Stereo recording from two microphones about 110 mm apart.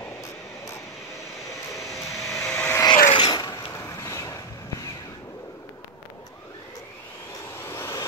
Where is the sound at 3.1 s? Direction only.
40° left (ahead or behind).